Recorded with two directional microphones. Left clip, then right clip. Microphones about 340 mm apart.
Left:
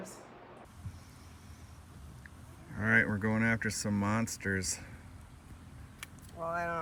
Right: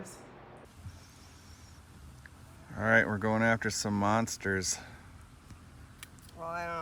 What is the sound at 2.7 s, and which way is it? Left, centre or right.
Speech, centre.